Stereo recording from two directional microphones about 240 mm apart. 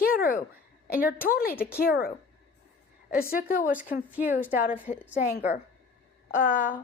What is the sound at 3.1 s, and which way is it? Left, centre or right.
Speech, left.